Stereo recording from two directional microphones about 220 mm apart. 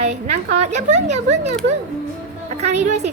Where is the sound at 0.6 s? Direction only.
30° right (ahead or behind).